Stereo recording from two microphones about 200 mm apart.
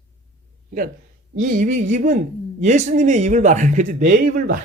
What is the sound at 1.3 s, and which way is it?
Speech, 40° right (ahead or behind).